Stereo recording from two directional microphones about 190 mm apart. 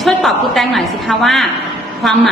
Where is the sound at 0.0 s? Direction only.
Centre (ahead or behind).